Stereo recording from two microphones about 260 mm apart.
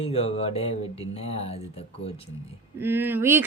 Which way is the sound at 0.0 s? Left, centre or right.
Left.